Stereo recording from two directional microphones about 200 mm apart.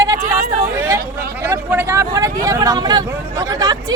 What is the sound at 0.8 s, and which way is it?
Chatter, 15° right (ahead or behind).